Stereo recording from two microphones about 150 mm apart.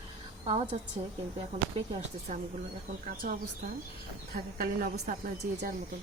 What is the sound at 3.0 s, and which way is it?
Speech, 65° right (ahead or behind).